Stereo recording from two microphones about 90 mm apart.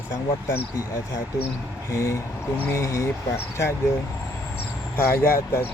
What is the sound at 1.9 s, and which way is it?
Speech, 35° left (ahead or behind).